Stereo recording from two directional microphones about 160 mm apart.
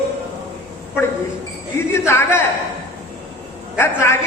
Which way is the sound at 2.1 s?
15° left (ahead or behind).